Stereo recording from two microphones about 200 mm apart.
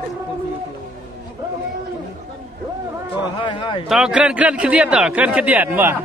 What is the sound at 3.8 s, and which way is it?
A man's voice, 5° right (ahead or behind).